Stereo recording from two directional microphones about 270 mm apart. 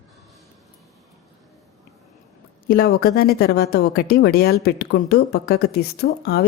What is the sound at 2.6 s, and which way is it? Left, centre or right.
Speech, left.